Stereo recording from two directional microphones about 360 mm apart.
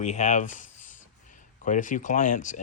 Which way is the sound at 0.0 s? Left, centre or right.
Centre.